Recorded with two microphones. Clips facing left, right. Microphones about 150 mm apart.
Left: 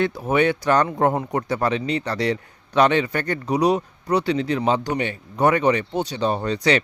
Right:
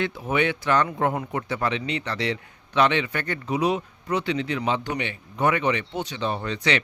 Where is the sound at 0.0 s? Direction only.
40° left (ahead or behind).